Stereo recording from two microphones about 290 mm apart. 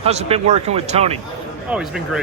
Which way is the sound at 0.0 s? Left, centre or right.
Right.